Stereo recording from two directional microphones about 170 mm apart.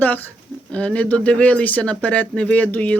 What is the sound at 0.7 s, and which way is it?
Speech, 5° left (ahead or behind).